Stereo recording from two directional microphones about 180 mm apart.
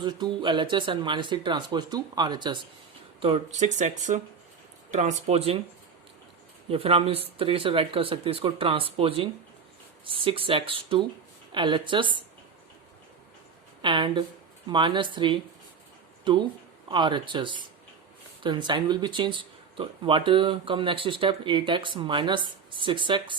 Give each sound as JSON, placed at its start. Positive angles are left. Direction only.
{"t": 0.0, "sound": "speech", "side_deg": -25}
{"t": 6.7, "sound": "speech", "side_deg": -30}
{"t": 13.8, "sound": "speech", "side_deg": -25}